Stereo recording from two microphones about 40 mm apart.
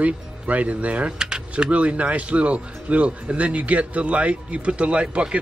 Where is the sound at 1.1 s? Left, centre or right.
Centre.